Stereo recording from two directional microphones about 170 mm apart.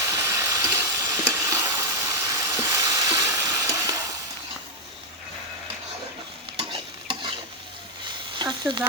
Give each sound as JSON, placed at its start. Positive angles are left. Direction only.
{"t": 0.1, "sound": "stir", "side_deg": -15}
{"t": 6.6, "sound": "stir", "side_deg": -30}
{"t": 8.4, "sound": "a sound", "side_deg": -25}